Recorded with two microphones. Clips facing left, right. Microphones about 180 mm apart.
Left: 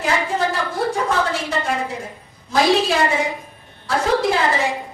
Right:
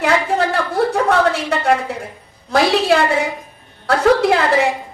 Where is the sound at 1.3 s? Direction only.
60° right (ahead or behind).